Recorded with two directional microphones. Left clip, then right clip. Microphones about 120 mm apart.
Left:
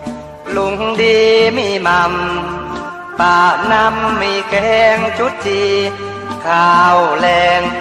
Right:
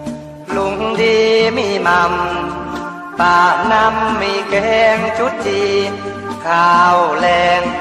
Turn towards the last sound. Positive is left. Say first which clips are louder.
# left 1 dB
turn(degrees=40)  # may be behind; listen again after turning